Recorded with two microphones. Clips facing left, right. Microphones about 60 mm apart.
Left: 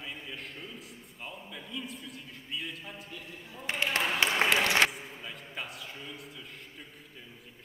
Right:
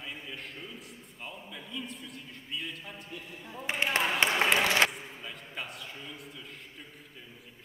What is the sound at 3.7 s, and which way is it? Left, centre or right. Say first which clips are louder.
Speech: right 1 dB; centre.